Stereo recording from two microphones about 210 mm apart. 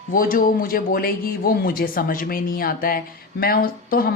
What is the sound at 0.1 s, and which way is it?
Speech, 40° left (ahead or behind).